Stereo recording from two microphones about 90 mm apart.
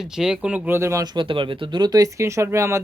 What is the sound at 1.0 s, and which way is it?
Speech, 50° right (ahead or behind).